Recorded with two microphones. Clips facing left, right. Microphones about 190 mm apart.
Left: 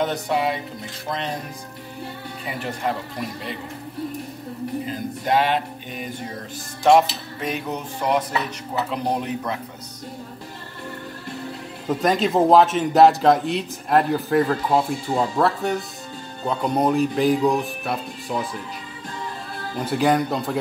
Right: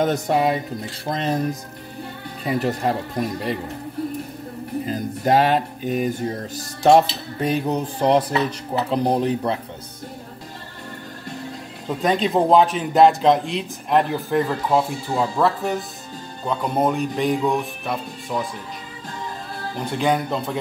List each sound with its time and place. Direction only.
0.0 s speech: 45° right (ahead or behind)
1.0 s music: 40° right (ahead or behind)
5.2 s music: 40° right (ahead or behind)
11.9 s a man's voice: centre (ahead or behind)
15.1 s speech: 15° left (ahead or behind)
15.4 s a man's voice: centre (ahead or behind)
19.8 s a man's voice: 5° left (ahead or behind)